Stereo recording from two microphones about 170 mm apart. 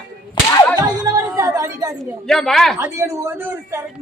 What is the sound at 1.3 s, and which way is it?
Speech, 20° right (ahead or behind).